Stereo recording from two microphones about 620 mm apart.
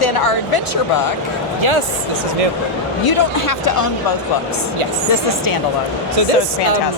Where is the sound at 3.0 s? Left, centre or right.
Left.